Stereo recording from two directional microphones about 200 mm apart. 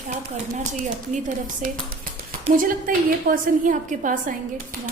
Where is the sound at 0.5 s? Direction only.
35° right (ahead or behind).